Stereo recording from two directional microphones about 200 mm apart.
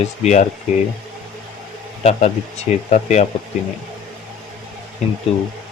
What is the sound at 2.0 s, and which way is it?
Speech, 30° left (ahead or behind).